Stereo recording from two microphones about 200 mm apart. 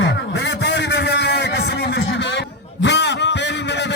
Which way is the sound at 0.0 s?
65° left (ahead or behind).